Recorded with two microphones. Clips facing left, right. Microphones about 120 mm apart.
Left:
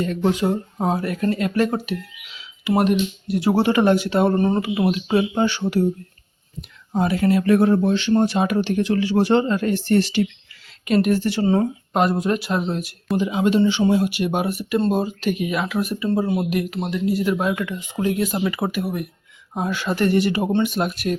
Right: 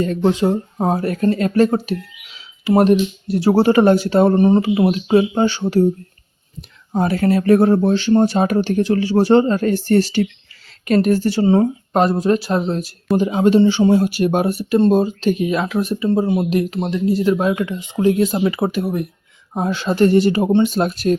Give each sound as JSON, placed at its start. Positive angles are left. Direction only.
{"t": 0.0, "sound": "speech", "side_deg": -30}
{"t": 1.0, "sound": "speech", "side_deg": -35}
{"t": 4.4, "sound": "speech", "side_deg": -20}
{"t": 7.0, "sound": "speech", "side_deg": -40}
{"t": 14.8, "sound": "speech", "side_deg": -25}